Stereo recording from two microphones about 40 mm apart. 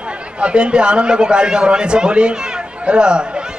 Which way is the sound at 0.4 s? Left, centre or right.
Right.